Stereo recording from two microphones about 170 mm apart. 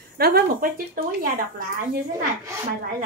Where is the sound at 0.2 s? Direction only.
60° right (ahead or behind).